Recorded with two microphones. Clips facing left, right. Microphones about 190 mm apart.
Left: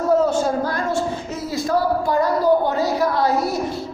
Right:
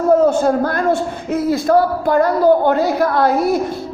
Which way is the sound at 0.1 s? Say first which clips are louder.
Right 5 dB; 55° right (ahead or behind).